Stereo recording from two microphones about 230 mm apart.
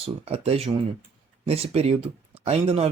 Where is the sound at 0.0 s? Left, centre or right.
Right.